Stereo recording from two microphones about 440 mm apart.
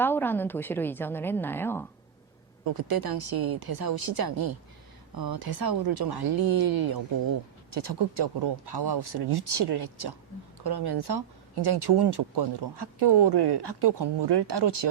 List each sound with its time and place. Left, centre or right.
0.0 s a woman's voice: centre
2.6 s a woman's voice: right